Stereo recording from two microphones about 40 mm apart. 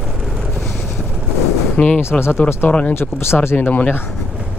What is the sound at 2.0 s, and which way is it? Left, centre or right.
Speech, left.